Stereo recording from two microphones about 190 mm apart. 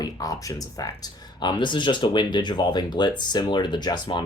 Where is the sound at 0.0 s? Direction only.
20° left (ahead or behind).